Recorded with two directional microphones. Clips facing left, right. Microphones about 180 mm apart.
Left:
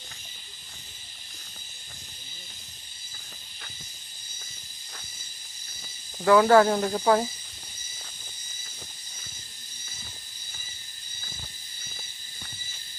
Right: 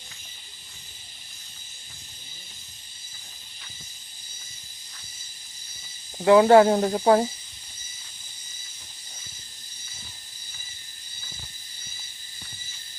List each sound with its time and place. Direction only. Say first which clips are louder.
6.2 s speech: right 3 dB; 25° right (ahead or behind)